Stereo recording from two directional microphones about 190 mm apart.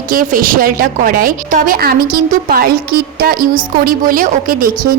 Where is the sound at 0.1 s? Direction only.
45° right (ahead or behind).